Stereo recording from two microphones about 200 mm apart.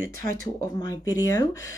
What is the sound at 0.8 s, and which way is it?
Speech, 20° left (ahead or behind).